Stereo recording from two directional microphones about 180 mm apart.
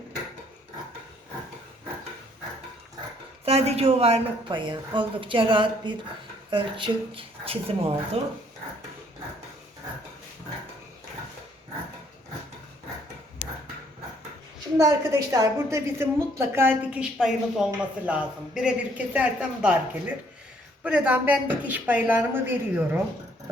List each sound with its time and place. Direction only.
3.4 s a woman's voice: 35° right (ahead or behind)
14.8 s a woman's voice: 15° right (ahead or behind)